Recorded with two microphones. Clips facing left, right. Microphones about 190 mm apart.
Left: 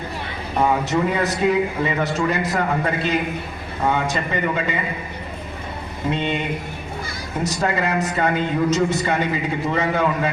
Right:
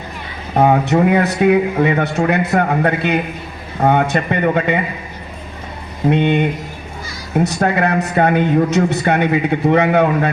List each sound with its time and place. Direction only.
0.6 s speech: 60° right (ahead or behind)
6.1 s speech: 60° right (ahead or behind)